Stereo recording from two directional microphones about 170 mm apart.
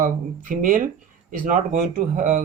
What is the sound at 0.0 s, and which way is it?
Speech, 50° right (ahead or behind).